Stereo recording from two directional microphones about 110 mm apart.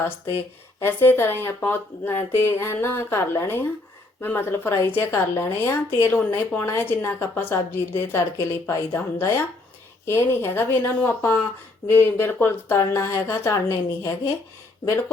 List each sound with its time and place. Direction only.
0.8 s a woman's voice: 20° left (ahead or behind)